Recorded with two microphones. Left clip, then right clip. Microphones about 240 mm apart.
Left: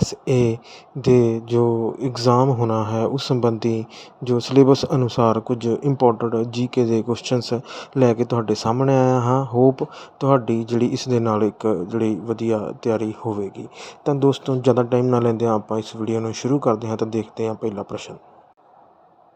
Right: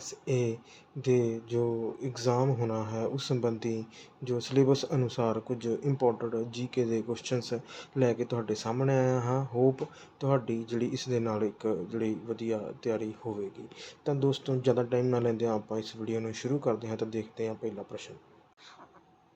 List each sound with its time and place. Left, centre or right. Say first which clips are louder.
0.0 s speech: left 12 dB; left